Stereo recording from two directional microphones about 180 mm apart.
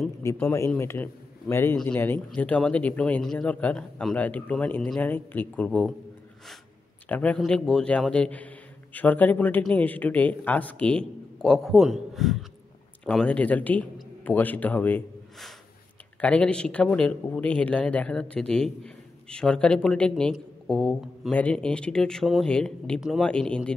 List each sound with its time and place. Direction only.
0.4 s a man's voice: 10° left (ahead or behind)
7.1 s a man's voice: 10° left (ahead or behind)